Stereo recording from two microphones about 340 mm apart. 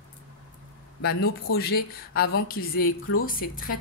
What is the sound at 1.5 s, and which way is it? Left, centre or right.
Speech, left.